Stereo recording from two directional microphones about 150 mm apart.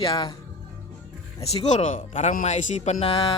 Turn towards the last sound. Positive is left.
turn(degrees=35)  # may be behind; listen again after turning